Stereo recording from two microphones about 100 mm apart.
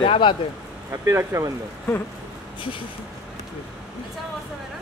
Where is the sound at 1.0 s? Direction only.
30° right (ahead or behind).